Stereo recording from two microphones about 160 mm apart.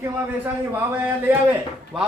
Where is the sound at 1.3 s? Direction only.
10° right (ahead or behind).